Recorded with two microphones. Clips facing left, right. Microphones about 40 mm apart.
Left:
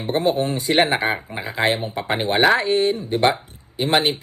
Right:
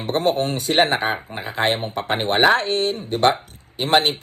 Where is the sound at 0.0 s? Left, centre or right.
Right.